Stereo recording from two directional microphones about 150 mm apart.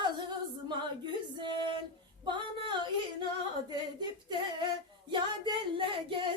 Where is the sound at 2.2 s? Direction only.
30° right (ahead or behind).